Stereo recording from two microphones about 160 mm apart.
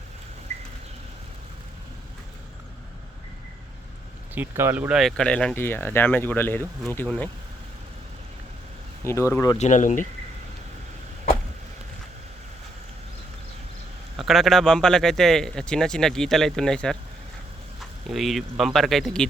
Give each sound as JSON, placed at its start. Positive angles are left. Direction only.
{"t": 4.4, "sound": "speech", "side_deg": -15}
{"t": 9.0, "sound": "speech", "side_deg": 15}
{"t": 9.6, "sound": "speech", "side_deg": 50}
{"t": 14.2, "sound": "speech", "side_deg": 0}
{"t": 18.1, "sound": "speech", "side_deg": 0}